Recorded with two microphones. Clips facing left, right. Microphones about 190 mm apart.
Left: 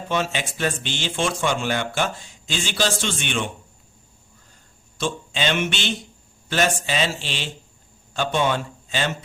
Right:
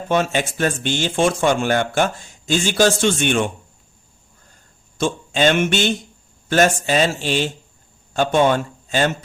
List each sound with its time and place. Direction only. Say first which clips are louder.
0.1 s speech: right 6 dB; 50° right (ahead or behind)
4.9 s a man's voice: right 6 dB; 45° right (ahead or behind)